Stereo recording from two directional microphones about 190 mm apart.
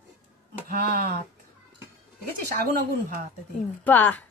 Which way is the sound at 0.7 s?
50° right (ahead or behind).